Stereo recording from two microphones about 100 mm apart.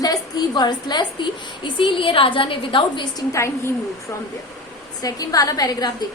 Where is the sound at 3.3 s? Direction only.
30° left (ahead or behind).